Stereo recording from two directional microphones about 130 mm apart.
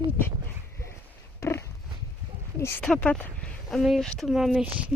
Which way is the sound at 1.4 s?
20° left (ahead or behind).